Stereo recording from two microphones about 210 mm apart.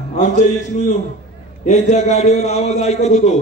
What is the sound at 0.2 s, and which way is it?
A man's voice, 35° left (ahead or behind).